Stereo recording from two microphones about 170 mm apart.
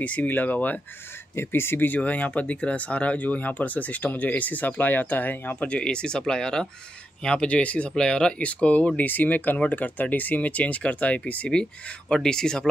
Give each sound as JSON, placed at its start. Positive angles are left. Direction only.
{"t": 0.0, "sound": "speech", "side_deg": 10}